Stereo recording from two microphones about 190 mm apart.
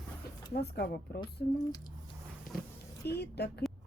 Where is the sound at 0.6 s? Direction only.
60° left (ahead or behind).